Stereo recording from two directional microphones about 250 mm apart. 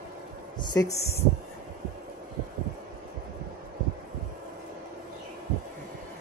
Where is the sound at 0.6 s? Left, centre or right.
Centre.